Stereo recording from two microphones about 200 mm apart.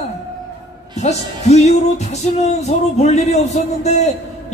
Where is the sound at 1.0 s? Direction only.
35° left (ahead or behind).